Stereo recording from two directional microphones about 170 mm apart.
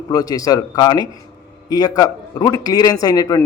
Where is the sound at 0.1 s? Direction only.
20° left (ahead or behind).